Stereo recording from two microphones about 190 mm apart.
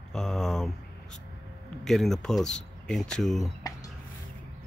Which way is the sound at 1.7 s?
Centre (ahead or behind).